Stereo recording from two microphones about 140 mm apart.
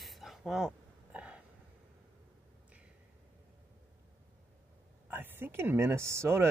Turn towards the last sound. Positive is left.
turn(degrees=-20)  # may be behind; listen again after turning